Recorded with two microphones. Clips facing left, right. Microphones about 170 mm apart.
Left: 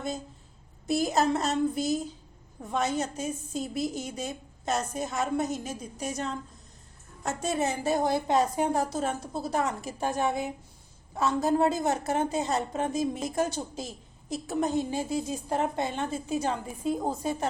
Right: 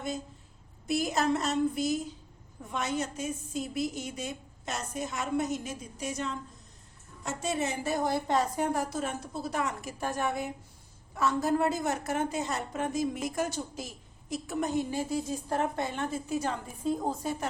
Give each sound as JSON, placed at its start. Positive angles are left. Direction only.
{"t": 0.9, "sound": "a woman's voice", "side_deg": 35}
{"t": 7.9, "sound": "a woman's voice", "side_deg": 25}
{"t": 16.8, "sound": "a woman's voice", "side_deg": 10}